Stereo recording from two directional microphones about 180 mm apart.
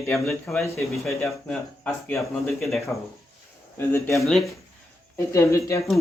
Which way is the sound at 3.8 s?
15° left (ahead or behind).